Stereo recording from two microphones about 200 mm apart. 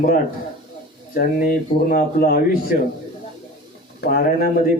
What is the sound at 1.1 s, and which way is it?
Speech, 45° left (ahead or behind).